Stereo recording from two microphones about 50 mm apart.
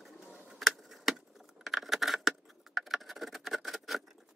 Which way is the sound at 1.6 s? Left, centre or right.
Centre.